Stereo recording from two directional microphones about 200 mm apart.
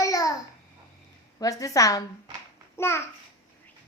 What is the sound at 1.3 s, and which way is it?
A woman's voice, 15° left (ahead or behind).